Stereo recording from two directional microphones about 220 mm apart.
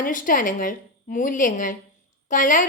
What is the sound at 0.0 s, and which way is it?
A woman's voice, 40° left (ahead or behind).